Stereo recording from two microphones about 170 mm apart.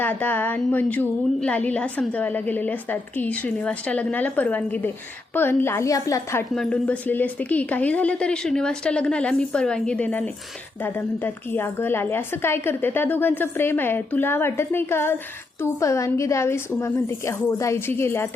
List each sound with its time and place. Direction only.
0.0 s a woman's voice: 10° left (ahead or behind)
6.5 s a woman's voice: 5° left (ahead or behind)